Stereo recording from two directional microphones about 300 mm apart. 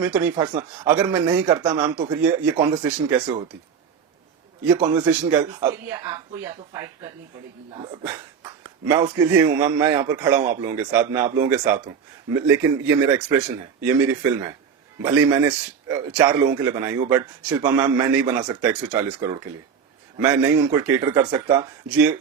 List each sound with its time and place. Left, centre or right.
0.0 s speech: centre
4.7 s speech: centre